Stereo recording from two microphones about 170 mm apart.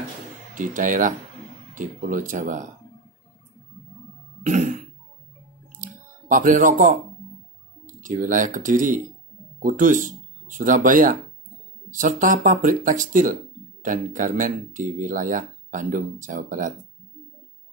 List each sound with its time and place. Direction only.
0.6 s speech: 50° right (ahead or behind)
4.4 s cough: 45° right (ahead or behind)
6.2 s speech: 50° right (ahead or behind)